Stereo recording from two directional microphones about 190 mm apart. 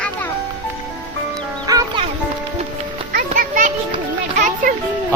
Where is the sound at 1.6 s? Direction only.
20° right (ahead or behind).